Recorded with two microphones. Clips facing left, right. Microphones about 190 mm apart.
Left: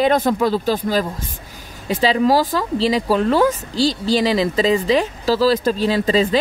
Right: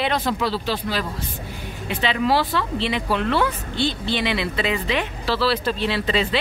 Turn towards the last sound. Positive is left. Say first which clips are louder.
# left 6 dB
turn(degrees=40)  # may be behind; listen again after turning